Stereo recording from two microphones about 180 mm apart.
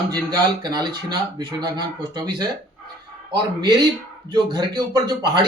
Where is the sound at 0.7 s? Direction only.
25° right (ahead or behind).